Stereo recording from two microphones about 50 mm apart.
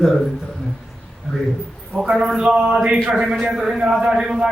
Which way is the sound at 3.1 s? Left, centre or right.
Centre.